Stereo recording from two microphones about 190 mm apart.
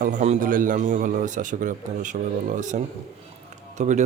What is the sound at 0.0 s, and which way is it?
A man's voice, 40° right (ahead or behind).